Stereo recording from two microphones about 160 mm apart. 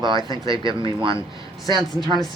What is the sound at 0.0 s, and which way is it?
Speech, 30° right (ahead or behind).